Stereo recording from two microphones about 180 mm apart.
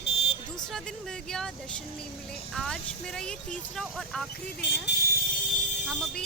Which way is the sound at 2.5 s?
5° left (ahead or behind).